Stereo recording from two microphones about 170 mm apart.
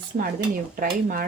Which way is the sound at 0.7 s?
55° right (ahead or behind).